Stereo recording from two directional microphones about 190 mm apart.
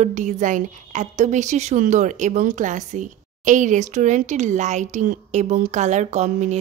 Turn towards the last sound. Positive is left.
turn(degrees=-35)  # may be behind; listen again after turning